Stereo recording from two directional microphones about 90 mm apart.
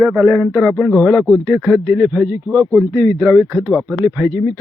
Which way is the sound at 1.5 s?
10° right (ahead or behind).